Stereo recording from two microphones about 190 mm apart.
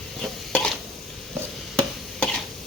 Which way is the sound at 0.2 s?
5° left (ahead or behind).